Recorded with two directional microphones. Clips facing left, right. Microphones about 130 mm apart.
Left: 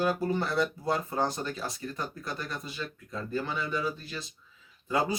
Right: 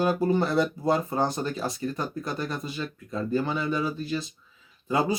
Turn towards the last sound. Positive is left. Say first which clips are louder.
# right 3 dB
turn(degrees=-20)  # may be behind; listen again after turning